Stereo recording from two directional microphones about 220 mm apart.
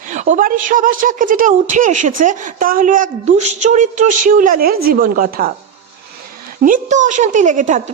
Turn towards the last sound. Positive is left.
turn(degrees=-35)  # may be behind; listen again after turning